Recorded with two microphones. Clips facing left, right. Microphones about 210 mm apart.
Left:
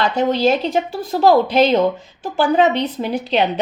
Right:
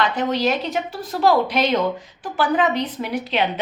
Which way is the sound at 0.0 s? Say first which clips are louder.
Left 4 dB; 30° left (ahead or behind).